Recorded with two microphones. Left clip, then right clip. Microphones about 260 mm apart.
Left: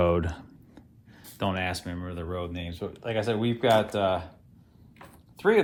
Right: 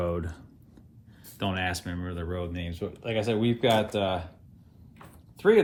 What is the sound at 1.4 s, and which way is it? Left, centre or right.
Speech, centre.